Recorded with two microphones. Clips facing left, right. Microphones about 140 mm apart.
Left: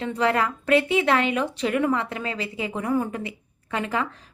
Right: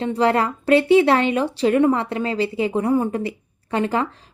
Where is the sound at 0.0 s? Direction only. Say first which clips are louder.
Right 4 dB; 35° right (ahead or behind).